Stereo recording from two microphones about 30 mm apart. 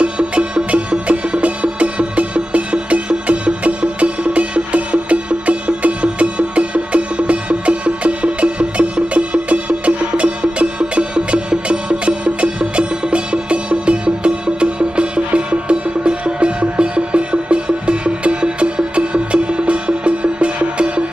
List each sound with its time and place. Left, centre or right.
0.0 s music: right
5.5 s music: right